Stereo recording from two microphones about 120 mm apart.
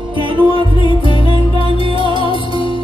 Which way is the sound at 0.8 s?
45° left (ahead or behind).